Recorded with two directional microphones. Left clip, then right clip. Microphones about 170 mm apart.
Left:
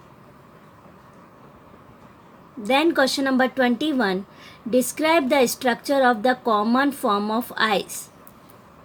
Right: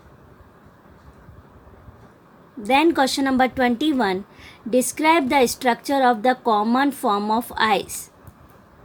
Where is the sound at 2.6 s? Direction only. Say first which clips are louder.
Right 1 dB; 25° right (ahead or behind).